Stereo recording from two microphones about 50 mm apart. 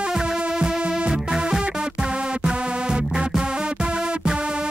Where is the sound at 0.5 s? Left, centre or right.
Centre.